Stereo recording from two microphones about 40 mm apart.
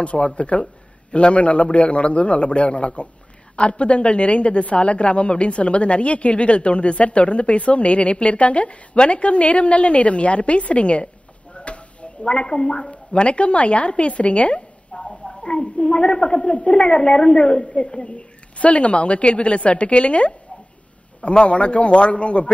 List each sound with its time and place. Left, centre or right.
0.0 s a woman's voice: left
11.5 s a sound: left
12.9 s a woman's voice: left
14.9 s a woman's voice: centre
18.6 s a woman's voice: left